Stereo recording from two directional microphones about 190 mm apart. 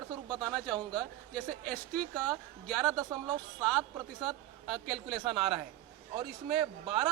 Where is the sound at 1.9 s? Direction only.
5° left (ahead or behind).